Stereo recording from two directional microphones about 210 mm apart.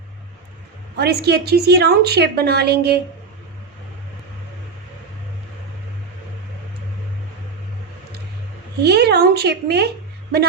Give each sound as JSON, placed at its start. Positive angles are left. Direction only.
{"t": 0.9, "sound": "a woman's voice", "side_deg": -50}
{"t": 8.8, "sound": "a woman's voice", "side_deg": -50}